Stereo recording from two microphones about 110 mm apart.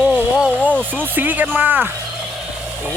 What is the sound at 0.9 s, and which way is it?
Speech, 15° right (ahead or behind).